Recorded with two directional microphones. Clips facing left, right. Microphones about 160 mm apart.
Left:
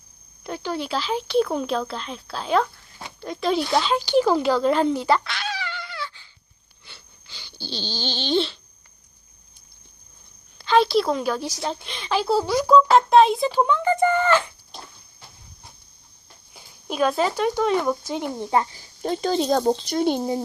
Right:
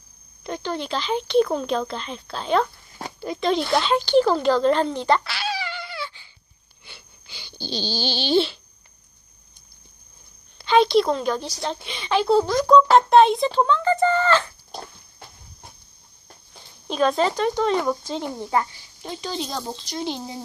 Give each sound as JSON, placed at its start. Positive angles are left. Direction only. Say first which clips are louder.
{"t": 0.4, "sound": "a child's voice", "louder": "even", "side_deg": 5}
{"t": 6.8, "sound": "a sound", "louder": "right 2 dB", "side_deg": -15}
{"t": 10.6, "sound": "a child's voice", "louder": "right 1 dB", "side_deg": 0}
{"t": 16.6, "sound": "speech", "louder": "right 1 dB", "side_deg": 10}
{"t": 18.7, "sound": "speech", "louder": "left 8 dB", "side_deg": 45}